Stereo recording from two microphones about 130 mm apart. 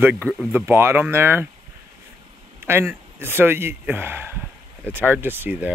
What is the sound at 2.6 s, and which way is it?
Speech, 15° right (ahead or behind).